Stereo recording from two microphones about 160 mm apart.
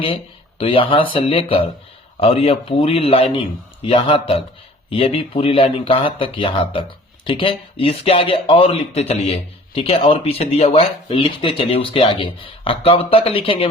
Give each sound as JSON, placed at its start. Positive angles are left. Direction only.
{"t": 0.6, "sound": "speech", "side_deg": 35}